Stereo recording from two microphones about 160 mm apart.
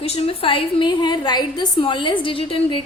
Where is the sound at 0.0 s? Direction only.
40° left (ahead or behind).